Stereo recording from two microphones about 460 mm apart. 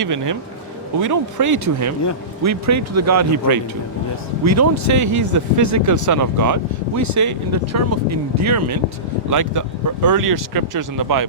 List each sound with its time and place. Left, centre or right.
0.0 s speech: right